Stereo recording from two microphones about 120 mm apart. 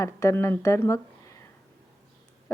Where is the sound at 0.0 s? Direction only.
25° left (ahead or behind).